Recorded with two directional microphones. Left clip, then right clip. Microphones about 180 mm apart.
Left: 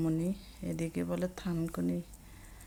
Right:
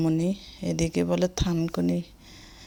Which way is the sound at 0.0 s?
35° right (ahead or behind).